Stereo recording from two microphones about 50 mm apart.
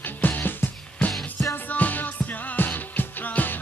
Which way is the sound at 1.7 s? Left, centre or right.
Left.